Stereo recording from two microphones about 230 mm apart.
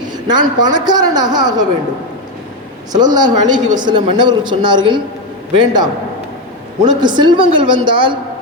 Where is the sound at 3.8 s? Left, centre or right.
Centre.